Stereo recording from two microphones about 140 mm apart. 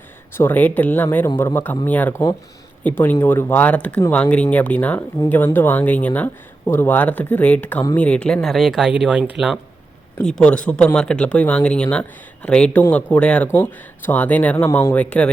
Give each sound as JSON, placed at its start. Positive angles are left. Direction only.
{"t": 0.3, "sound": "speech", "side_deg": 15}
{"t": 10.2, "sound": "speech", "side_deg": 5}